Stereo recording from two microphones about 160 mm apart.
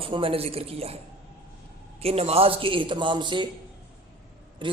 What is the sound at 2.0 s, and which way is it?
A man's voice, 40° right (ahead or behind).